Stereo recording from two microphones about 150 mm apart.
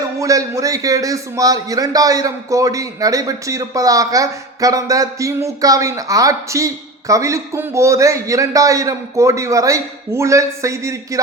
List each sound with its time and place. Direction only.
0.2 s a man's voice: 20° right (ahead or behind)